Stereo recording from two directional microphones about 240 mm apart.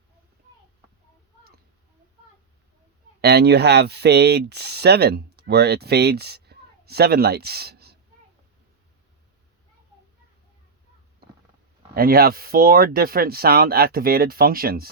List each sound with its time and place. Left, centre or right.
3.2 s speech: right
11.9 s speech: right